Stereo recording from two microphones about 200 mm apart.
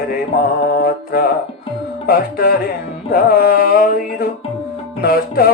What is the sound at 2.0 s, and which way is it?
Speech, 50° left (ahead or behind).